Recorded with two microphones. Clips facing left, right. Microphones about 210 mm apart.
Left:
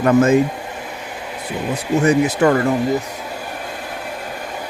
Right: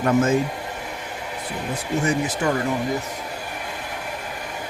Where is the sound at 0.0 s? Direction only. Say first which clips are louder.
Left 6 dB; 70° left (ahead or behind).